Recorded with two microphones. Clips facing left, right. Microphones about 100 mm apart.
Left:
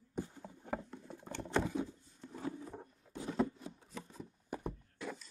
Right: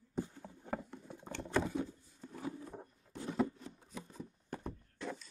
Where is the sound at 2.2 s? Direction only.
5° right (ahead or behind).